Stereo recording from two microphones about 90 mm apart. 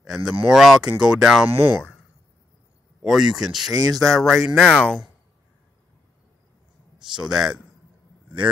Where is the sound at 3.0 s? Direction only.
5° right (ahead or behind).